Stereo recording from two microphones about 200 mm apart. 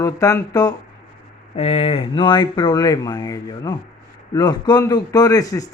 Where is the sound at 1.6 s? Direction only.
30° left (ahead or behind).